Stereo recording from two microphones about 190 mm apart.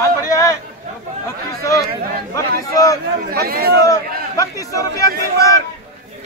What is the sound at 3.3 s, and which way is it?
Speech, 50° right (ahead or behind).